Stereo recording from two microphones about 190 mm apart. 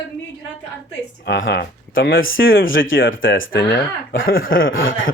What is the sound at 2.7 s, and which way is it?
Speech, 90° left.